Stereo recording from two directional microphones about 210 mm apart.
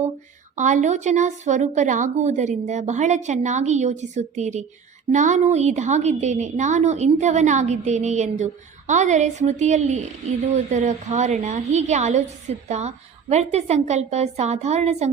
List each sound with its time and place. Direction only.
0.5 s a woman's voice: 35° right (ahead or behind)